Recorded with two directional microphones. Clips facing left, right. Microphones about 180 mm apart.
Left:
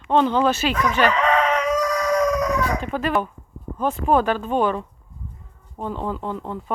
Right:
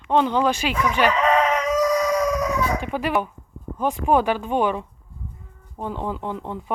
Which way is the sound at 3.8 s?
10° right (ahead or behind).